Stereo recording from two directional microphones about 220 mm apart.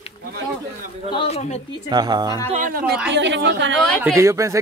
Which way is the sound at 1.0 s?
25° left (ahead or behind).